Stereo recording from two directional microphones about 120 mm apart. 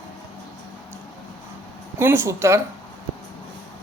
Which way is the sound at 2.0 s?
20° right (ahead or behind).